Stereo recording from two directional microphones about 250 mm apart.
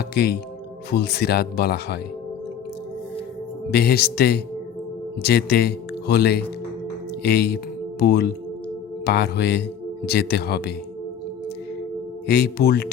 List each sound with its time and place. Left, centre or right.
0.1 s speech: left
3.7 s speech: left
12.3 s speech: left